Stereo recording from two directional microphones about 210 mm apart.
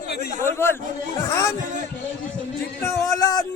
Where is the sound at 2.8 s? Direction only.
15° left (ahead or behind).